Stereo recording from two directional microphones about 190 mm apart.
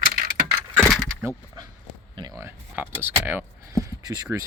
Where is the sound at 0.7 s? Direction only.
10° right (ahead or behind).